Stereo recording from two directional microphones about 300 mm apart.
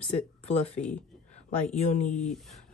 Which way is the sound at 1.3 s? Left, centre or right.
Left.